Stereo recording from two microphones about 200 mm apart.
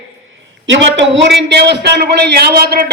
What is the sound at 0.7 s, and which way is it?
A man's voice, 65° right (ahead or behind).